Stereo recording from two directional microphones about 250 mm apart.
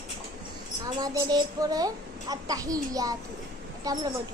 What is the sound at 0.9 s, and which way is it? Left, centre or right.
A child's voice, centre.